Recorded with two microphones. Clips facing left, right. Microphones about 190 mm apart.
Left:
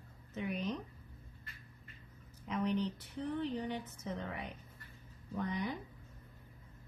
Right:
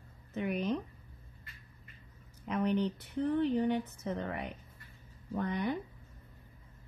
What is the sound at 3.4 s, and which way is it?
Speech, 60° right (ahead or behind).